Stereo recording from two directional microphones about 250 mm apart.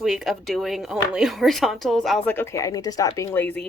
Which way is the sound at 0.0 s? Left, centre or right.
Centre.